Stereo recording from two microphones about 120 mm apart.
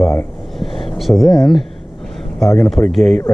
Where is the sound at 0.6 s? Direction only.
Centre (ahead or behind).